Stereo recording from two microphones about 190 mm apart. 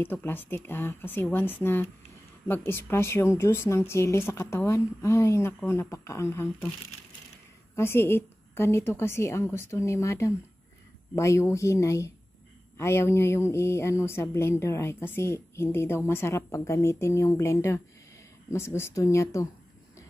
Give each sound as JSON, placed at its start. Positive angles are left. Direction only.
{"t": 0.0, "sound": "a woman's voice", "side_deg": 10}
{"t": 7.7, "sound": "a woman's voice", "side_deg": 10}